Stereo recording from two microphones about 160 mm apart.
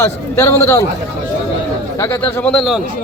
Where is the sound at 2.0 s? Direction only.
10° left (ahead or behind).